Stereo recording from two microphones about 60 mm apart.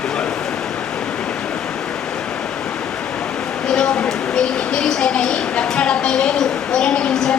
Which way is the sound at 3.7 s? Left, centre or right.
Centre.